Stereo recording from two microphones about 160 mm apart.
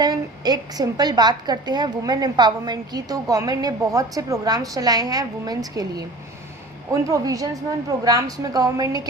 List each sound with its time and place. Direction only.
0.0 s a woman's voice: 25° right (ahead or behind)